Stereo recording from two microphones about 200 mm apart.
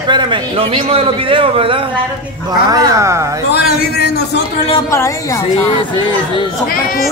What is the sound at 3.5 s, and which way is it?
Speech, 55° left (ahead or behind).